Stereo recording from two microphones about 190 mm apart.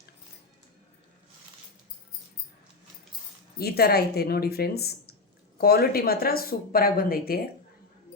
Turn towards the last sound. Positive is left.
turn(degrees=50)  # may be behind; listen again after turning